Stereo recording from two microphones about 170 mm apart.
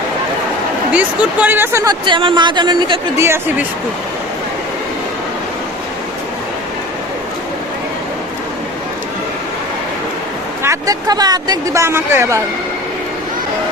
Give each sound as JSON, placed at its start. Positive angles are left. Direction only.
{"t": 0.9, "sound": "speech", "side_deg": -10}
{"t": 3.2, "sound": "speech", "side_deg": -15}
{"t": 10.6, "sound": "speech", "side_deg": -20}